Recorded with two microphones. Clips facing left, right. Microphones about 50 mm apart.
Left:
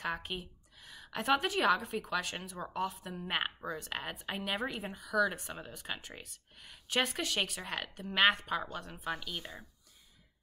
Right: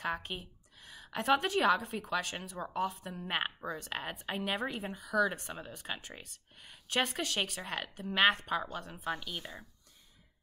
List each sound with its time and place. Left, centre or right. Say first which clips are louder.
0.0 s a woman's voice: right 1 dB; centre